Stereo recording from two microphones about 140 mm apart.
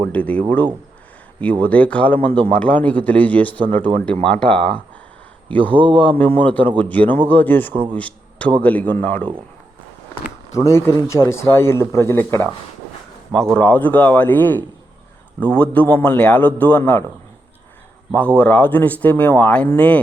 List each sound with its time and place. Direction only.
0.0 s speech: 10° left (ahead or behind)
1.6 s a man's voice: 10° left (ahead or behind)
5.7 s a man's voice: 35° right (ahead or behind)
6.4 s speech: 10° left (ahead or behind)
7.7 s a man's voice: 35° right (ahead or behind)
7.9 s speech: 10° left (ahead or behind)
10.5 s speech: 20° left (ahead or behind)
13.3 s speech: 5° left (ahead or behind)
18.1 s speech: 10° left (ahead or behind)